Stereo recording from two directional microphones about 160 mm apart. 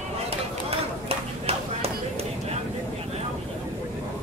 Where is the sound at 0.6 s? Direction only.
40° right (ahead or behind).